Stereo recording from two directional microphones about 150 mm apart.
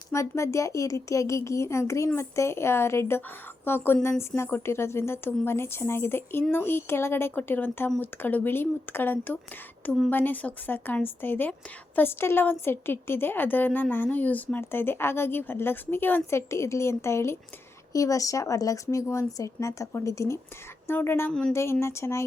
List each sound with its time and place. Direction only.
0.1 s a woman's voice: 20° left (ahead or behind)